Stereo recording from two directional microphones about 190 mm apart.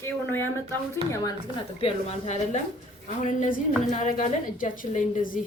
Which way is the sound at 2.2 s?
35° left (ahead or behind).